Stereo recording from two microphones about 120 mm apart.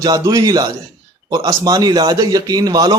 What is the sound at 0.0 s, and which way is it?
Speech, 35° right (ahead or behind).